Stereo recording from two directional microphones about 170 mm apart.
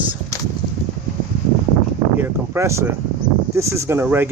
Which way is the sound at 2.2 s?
15° right (ahead or behind).